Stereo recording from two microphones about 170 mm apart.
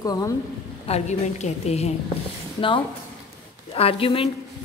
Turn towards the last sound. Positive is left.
turn(degrees=35)  # may be behind; listen again after turning